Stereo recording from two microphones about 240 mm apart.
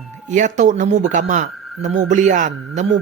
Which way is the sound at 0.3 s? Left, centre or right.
Right.